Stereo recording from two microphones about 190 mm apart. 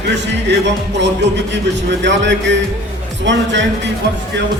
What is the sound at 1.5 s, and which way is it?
A man's voice, 70° right (ahead or behind).